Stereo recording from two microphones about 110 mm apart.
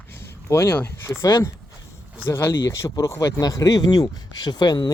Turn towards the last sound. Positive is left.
turn(degrees=40)  # may be behind; listen again after turning